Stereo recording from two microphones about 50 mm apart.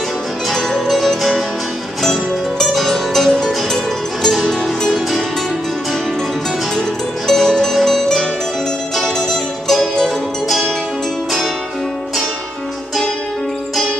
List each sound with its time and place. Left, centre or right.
0.5 s music: centre
2.6 s music: centre
7.2 s music: centre
9.7 s music: centre